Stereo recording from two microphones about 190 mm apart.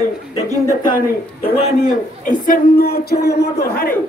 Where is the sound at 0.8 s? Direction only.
50° left (ahead or behind).